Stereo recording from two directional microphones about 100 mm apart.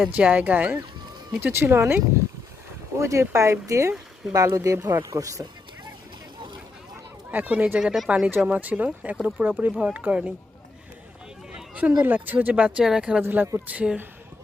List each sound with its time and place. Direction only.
0.1 s speech: 15° right (ahead or behind)
3.0 s speech: 30° right (ahead or behind)
7.3 s speech: 15° right (ahead or behind)
11.5 s speech: 15° right (ahead or behind)
13.2 s speech: 20° right (ahead or behind)